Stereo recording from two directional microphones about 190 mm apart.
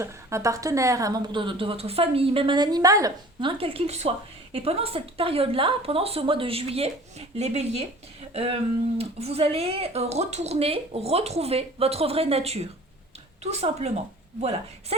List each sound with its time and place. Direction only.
0.0 s a woman's voice: 15° right (ahead or behind)
3.6 s speech: 30° right (ahead or behind)